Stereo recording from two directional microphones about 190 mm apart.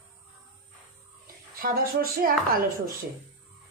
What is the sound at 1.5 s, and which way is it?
Speech, 50° right (ahead or behind).